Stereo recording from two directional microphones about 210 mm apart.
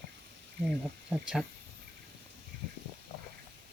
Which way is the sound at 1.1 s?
5° right (ahead or behind).